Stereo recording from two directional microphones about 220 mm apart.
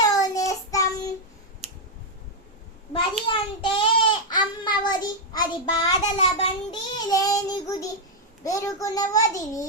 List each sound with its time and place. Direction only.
0.0 s child singing: 15° left (ahead or behind)
1.6 s a sound: 25° right (ahead or behind)
3.2 s child singing: 25° left (ahead or behind)
8.4 s a child's voice: 15° left (ahead or behind)